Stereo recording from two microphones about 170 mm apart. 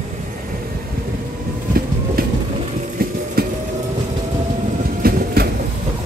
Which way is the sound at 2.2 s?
60° right (ahead or behind).